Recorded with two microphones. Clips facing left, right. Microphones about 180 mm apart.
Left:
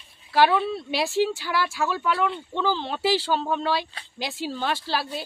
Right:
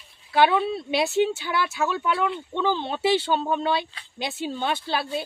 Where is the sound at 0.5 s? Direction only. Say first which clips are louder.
Even; centre (ahead or behind).